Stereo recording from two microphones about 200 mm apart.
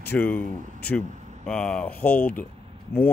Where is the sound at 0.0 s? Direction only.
10° left (ahead or behind).